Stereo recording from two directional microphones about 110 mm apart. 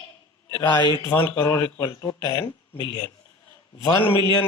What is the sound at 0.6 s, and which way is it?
Speech, 40° left (ahead or behind).